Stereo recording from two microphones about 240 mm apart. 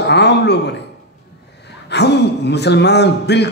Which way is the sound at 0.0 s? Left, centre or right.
Left.